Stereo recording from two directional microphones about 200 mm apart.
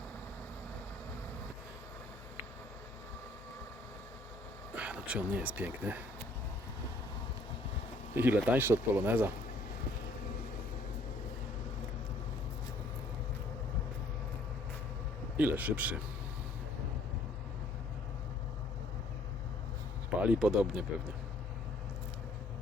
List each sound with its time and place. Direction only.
4.7 s speech: 5° right (ahead or behind)
8.1 s speech: 10° right (ahead or behind)
15.4 s speech: 10° right (ahead or behind)
20.2 s speech: 5° right (ahead or behind)